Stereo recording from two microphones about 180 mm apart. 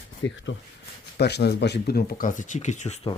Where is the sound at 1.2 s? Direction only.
65° left (ahead or behind); by 3.0 s 40° left (ahead or behind).